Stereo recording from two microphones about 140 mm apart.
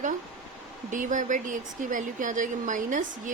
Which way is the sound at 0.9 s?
65° right (ahead or behind).